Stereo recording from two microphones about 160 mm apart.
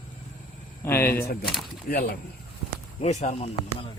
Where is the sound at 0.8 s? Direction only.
15° left (ahead or behind).